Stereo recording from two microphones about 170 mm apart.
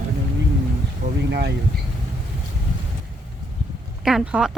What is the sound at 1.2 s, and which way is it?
Speech, 75° right (ahead or behind).